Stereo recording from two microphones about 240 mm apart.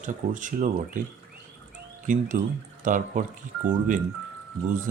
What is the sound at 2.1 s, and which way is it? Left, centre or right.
Speech, right.